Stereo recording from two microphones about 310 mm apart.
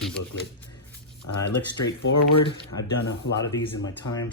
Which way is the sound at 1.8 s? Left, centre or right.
Left.